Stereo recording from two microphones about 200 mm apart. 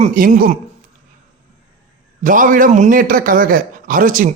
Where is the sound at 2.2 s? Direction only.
40° right (ahead or behind).